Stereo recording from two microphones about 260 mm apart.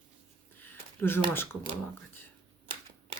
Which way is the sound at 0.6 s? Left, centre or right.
Centre.